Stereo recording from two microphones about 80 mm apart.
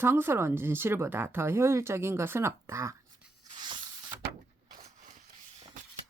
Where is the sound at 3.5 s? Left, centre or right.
Right.